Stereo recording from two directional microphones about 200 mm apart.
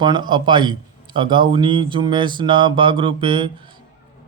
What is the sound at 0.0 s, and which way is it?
A man's voice, 20° right (ahead or behind).